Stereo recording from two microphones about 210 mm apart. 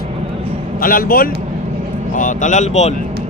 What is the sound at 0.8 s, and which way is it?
Speech, 40° left (ahead or behind).